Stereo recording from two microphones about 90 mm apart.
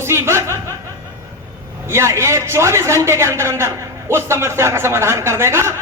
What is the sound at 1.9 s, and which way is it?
A man's voice, 30° right (ahead or behind).